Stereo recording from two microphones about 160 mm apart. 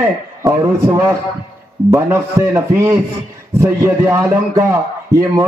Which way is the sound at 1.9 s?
20° right (ahead or behind).